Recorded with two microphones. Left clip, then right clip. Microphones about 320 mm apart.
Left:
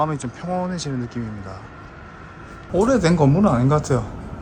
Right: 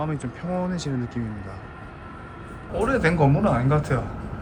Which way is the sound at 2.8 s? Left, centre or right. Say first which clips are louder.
Left 3 dB; centre.